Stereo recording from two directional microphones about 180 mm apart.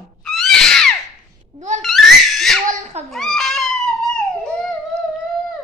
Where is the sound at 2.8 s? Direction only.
40° right (ahead or behind).